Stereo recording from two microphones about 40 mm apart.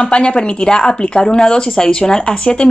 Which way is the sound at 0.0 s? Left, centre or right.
Left.